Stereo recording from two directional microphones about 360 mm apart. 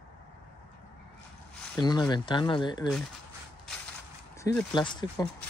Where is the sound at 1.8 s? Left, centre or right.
Centre.